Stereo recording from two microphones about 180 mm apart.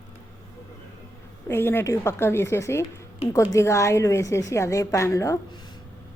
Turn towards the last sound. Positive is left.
turn(degrees=15)  # may be behind; listen again after turning